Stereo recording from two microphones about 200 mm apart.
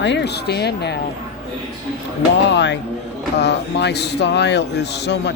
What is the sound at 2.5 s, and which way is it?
Speech, 60° left (ahead or behind).